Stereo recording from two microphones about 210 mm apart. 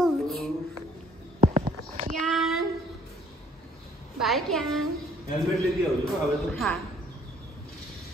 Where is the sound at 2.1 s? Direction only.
Centre (ahead or behind).